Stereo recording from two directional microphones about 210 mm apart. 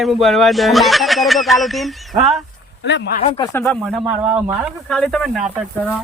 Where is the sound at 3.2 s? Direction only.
20° left (ahead or behind).